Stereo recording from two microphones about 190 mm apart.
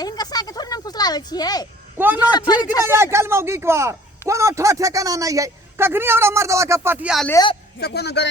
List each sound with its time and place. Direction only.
0.0 s a sound: 20° left (ahead or behind)
2.0 s a man's voice: 10° right (ahead or behind)
7.8 s a man's voice: 60° left (ahead or behind)